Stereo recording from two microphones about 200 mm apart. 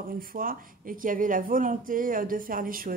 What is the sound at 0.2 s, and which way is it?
Speech, 45° right (ahead or behind).